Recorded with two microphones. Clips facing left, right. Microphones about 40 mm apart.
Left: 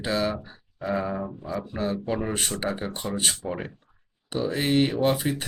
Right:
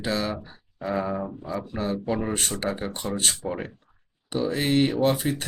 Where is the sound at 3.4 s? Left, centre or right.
Right.